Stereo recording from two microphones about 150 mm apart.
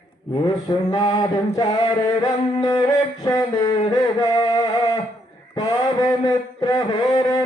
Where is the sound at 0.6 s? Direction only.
30° left (ahead or behind).